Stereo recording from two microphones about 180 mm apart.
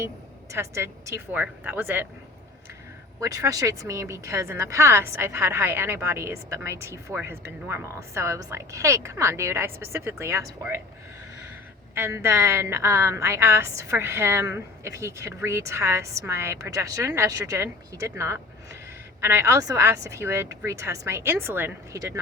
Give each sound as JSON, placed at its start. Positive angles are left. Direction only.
{"t": 0.5, "sound": "a woman's voice", "side_deg": -15}
{"t": 3.2, "sound": "a woman's voice", "side_deg": -20}
{"t": 11.9, "sound": "a woman's voice", "side_deg": -15}